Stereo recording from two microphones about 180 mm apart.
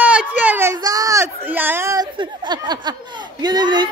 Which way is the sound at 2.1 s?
25° right (ahead or behind).